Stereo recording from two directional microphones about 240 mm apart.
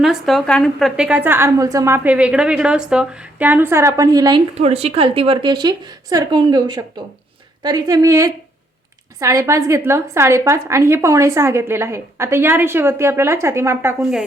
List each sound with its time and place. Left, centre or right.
0.0 s a woman's voice: centre